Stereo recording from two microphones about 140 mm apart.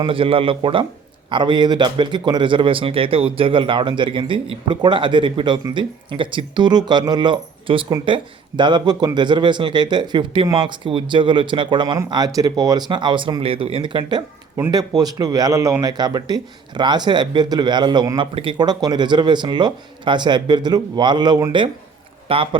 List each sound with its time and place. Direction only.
0.0 s a man's voice: 40° right (ahead or behind)
22.3 s speech: 40° right (ahead or behind)